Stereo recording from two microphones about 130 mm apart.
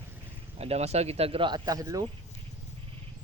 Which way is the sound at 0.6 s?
55° right (ahead or behind).